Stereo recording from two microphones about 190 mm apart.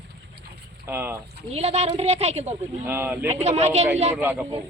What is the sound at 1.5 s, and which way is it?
A woman's voice, 35° right (ahead or behind).